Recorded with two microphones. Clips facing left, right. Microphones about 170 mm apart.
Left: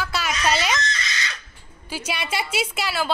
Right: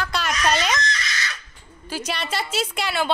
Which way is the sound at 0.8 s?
25° left (ahead or behind).